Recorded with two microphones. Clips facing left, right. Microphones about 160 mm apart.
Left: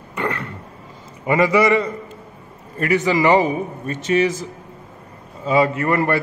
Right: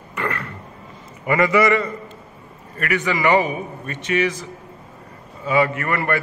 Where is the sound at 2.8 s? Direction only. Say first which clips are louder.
Left 4 dB; 30° left (ahead or behind).